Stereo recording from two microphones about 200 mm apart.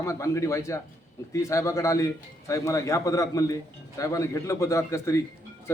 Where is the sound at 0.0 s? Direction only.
15° left (ahead or behind).